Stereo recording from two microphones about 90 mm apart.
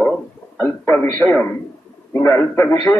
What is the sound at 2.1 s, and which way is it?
Speech, 30° left (ahead or behind).